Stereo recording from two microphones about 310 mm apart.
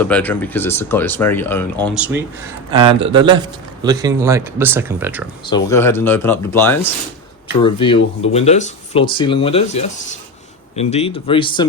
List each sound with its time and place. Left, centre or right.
0.0 s speech: centre
2.0 s a man's voice: centre
5.5 s speech: centre